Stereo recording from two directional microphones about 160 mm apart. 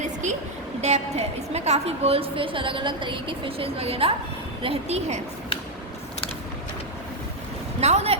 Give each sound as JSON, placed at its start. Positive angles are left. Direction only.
{"t": 0.8, "sound": "a woman's voice", "side_deg": -45}
{"t": 7.8, "sound": "speech", "side_deg": -40}